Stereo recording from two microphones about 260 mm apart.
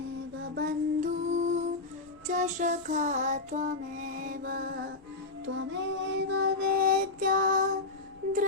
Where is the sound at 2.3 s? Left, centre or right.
Right.